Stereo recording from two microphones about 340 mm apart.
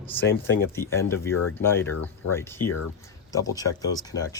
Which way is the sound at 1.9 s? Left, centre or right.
Left.